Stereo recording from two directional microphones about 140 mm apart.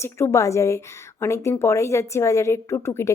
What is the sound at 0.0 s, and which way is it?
A woman's voice, 20° left (ahead or behind).